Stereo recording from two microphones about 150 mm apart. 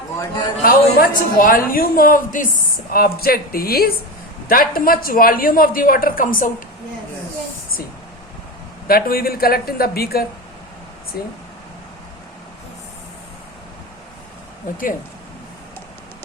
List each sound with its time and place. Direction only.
0.6 s a woman's voice: 80° left
2.9 s speech: 90° left
4.4 s a woman's voice: 70° left (ahead or behind)
8.9 s speech: 80° left
14.7 s speech: 60° left (ahead or behind)